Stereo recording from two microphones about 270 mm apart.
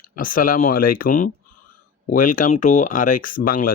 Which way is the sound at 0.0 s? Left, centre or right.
Left.